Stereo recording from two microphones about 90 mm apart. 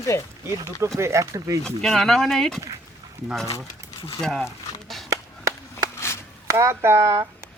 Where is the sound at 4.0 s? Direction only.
90° left.